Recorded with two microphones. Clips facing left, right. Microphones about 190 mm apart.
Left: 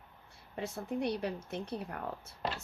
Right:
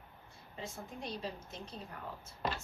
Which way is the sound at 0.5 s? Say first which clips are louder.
Left 9 dB; 65° left (ahead or behind).